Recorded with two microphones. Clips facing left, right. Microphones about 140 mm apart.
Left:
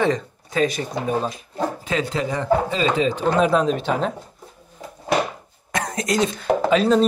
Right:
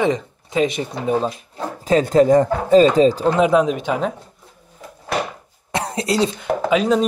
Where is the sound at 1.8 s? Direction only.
40° right (ahead or behind).